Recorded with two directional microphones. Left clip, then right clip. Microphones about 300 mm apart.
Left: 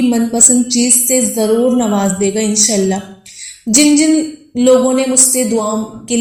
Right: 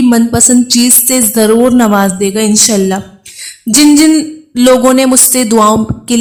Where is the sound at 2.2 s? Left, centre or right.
Right.